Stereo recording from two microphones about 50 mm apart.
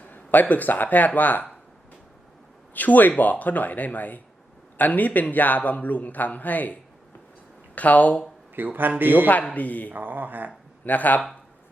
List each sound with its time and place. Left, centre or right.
0.0 s speech: left
2.7 s a man's voice: left
7.8 s a man's voice: left
8.5 s speech: right
9.2 s a man's voice: left
9.9 s speech: right
10.8 s a man's voice: left